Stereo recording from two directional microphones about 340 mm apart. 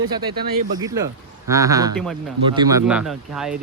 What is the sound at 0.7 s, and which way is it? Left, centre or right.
Speech, centre.